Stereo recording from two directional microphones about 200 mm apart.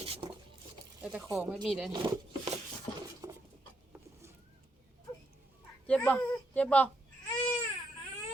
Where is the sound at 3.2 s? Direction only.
20° right (ahead or behind).